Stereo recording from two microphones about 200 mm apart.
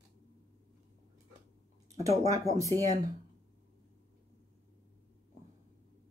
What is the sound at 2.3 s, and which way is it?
Speech, 15° right (ahead or behind).